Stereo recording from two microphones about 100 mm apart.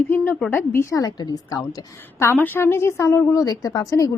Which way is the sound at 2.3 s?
20° left (ahead or behind).